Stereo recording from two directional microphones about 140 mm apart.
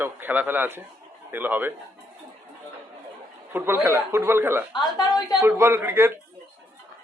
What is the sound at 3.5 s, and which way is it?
Speech, 15° right (ahead or behind).